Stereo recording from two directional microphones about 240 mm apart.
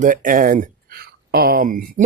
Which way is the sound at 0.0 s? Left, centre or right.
Right.